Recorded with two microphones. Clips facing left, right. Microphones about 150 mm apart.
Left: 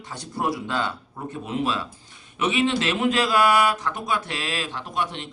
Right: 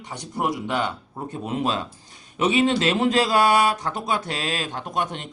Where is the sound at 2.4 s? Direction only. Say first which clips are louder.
Right 3 dB; 35° right (ahead or behind).